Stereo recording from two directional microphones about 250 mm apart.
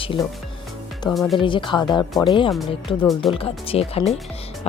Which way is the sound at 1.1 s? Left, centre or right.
Centre.